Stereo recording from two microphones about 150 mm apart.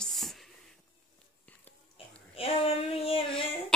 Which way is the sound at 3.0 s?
40° left (ahead or behind).